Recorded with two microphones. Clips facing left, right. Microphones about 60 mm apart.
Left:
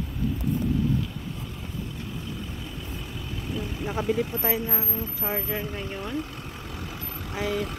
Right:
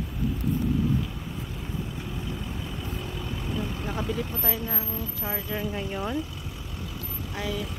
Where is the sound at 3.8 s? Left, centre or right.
Centre.